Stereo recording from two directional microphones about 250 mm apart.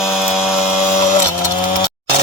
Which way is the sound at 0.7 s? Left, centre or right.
Left.